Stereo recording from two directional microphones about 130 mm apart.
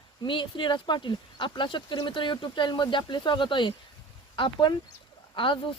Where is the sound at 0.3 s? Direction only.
40° left (ahead or behind).